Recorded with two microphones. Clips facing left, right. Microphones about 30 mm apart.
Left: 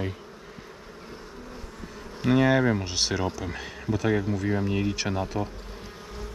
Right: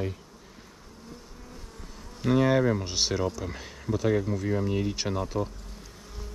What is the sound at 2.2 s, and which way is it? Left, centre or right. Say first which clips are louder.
Speech: left 2 dB; left.